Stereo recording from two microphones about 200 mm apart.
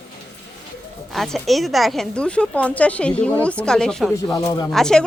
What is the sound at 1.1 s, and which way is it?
Speech, centre (ahead or behind).